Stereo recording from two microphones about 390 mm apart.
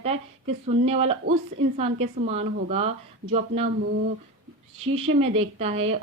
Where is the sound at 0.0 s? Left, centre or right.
Centre.